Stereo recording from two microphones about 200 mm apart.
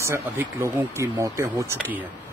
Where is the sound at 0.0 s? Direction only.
15° right (ahead or behind).